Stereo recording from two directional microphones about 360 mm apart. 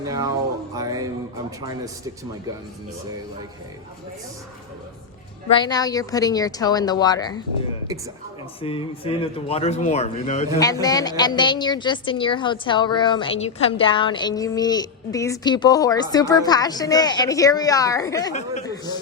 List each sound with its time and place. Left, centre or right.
0.0 s speech: centre
5.5 s a woman's voice: centre
8.6 s a woman's voice: centre